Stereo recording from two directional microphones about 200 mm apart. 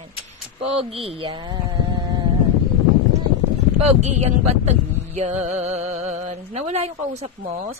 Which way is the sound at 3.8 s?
35° right (ahead or behind).